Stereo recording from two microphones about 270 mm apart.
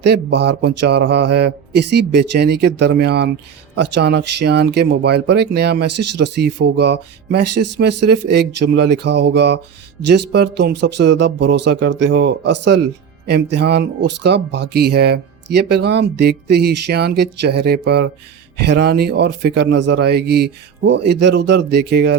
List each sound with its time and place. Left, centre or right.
0.0 s speech: right